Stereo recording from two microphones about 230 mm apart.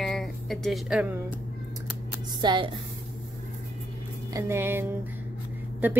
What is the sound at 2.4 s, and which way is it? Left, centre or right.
Speech, centre.